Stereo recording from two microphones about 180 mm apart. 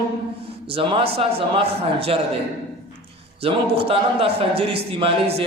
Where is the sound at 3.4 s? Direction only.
30° right (ahead or behind).